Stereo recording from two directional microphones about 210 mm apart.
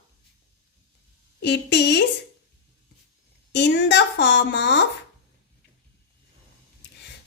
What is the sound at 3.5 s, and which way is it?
A woman's voice, 55° left (ahead or behind).